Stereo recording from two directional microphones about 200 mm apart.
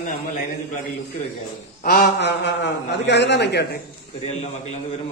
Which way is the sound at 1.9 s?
50° left (ahead or behind).